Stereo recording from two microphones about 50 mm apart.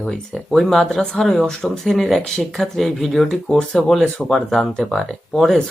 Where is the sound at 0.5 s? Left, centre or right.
Centre.